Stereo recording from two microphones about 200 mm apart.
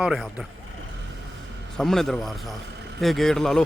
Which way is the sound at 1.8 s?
Centre (ahead or behind).